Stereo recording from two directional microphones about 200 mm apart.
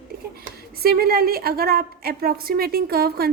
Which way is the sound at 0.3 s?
50° right (ahead or behind).